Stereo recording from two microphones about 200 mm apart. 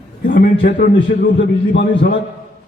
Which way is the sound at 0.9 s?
60° left (ahead or behind).